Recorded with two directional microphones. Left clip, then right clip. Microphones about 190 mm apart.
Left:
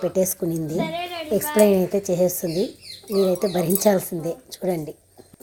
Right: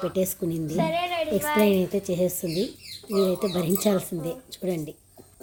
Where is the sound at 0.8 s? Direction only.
40° right (ahead or behind).